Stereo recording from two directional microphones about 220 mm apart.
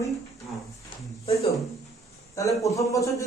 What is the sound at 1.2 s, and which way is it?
Speech, 25° left (ahead or behind).